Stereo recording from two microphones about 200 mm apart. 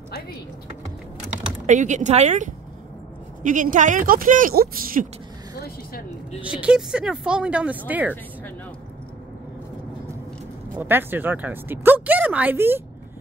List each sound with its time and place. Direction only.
1.7 s a woman's voice: 35° right (ahead or behind)
6.4 s speech: 5° right (ahead or behind)
10.8 s speech: 10° right (ahead or behind)